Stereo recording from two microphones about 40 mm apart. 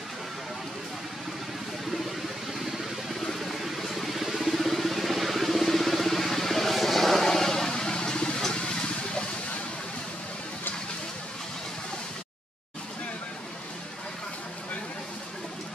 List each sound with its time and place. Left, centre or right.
2.6 s vehicle: centre; by 9.2 s left